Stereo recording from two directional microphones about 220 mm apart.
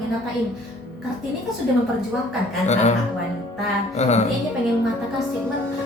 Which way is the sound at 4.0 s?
30° left (ahead or behind).